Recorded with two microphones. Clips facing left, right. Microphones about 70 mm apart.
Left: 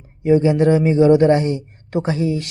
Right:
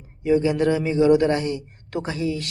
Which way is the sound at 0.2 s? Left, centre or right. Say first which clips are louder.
Left 5 dB; left.